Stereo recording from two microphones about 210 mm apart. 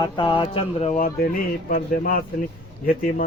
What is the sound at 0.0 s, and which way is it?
Speech, 20° left (ahead or behind).